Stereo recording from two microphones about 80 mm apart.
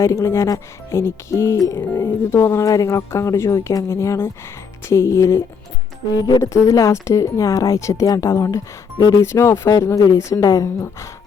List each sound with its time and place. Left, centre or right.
0.0 s speech: left
1.5 s speech: left
1.8 s speech: left
6.4 s speech: left
9.0 s speech: left
9.2 s speech: left